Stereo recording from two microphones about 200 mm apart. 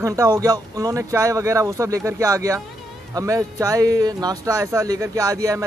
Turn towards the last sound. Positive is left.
turn(degrees=-15)  # may be behind; listen again after turning